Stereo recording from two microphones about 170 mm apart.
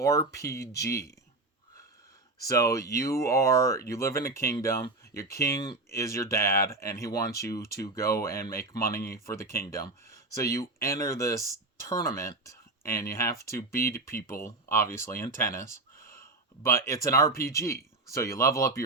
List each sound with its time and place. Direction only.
0.0 s speech: 15° left (ahead or behind)
2.4 s speech: 20° left (ahead or behind)
14.1 s speech: 55° left (ahead or behind)
14.3 s speech: 15° left (ahead or behind)
16.6 s speech: 15° left (ahead or behind)